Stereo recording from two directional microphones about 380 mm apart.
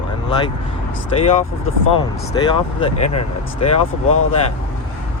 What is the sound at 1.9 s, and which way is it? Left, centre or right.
Speech, centre.